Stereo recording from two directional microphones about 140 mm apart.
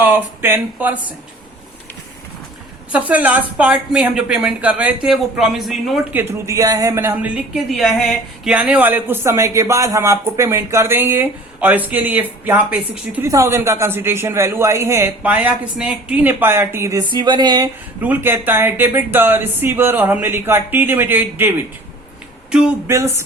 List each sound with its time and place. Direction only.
0.0 s speech: 15° right (ahead or behind)
2.9 s a man's voice: 10° right (ahead or behind)
6.1 s speech: 20° right (ahead or behind)
7.5 s speech: centre (ahead or behind)
8.5 s a man's voice: 10° right (ahead or behind)
13.2 s a man's voice: 20° right (ahead or behind)
17.0 s speech: 35° right (ahead or behind)
18.0 s a man's voice: 15° right (ahead or behind)
22.9 s speech: 20° right (ahead or behind)